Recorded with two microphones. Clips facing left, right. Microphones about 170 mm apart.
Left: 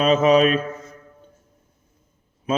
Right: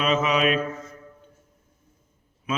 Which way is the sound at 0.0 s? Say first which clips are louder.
Left 7 dB; 35° left (ahead or behind).